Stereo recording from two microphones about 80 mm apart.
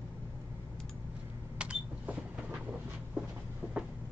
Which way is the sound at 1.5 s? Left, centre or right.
Centre.